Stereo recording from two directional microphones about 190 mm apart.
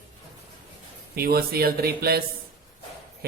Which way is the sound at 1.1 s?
50° right (ahead or behind).